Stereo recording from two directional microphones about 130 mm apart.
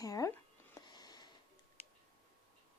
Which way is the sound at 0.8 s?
35° left (ahead or behind).